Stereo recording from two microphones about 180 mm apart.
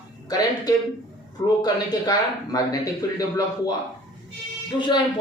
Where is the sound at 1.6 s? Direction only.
20° left (ahead or behind).